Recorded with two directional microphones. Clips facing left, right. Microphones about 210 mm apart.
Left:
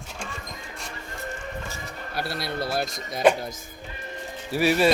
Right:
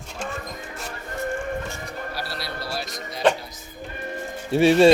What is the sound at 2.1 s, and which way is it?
Speech, 55° left (ahead or behind).